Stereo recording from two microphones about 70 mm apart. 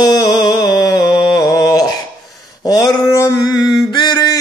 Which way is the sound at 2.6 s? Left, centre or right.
Left.